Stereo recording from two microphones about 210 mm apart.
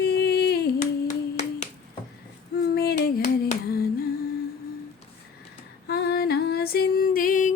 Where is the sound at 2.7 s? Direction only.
45° left (ahead or behind).